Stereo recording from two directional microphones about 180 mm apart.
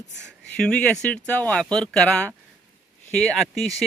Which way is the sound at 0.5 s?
5° left (ahead or behind).